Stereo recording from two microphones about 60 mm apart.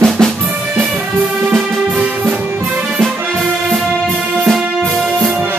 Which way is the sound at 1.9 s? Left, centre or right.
Right.